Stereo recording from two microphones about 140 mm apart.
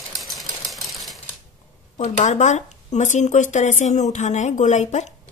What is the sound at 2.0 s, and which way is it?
Speech, 55° left (ahead or behind).